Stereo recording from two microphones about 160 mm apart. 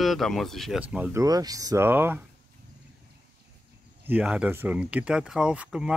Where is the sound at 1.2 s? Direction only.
25° right (ahead or behind).